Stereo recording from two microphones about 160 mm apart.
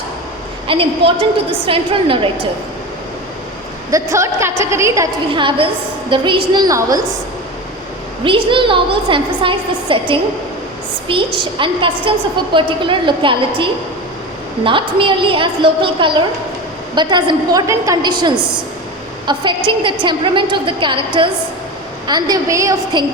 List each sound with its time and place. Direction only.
0.7 s a woman's voice: 35° right (ahead or behind)
3.9 s a woman's voice: 20° right (ahead or behind)
5.3 s a woman's voice: 30° right (ahead or behind)
8.2 s a woman's voice: 30° right (ahead or behind)
11.3 s a woman's voice: 30° right (ahead or behind)
14.6 s a woman's voice: 30° right (ahead or behind)
22.0 s a woman's voice: 25° right (ahead or behind)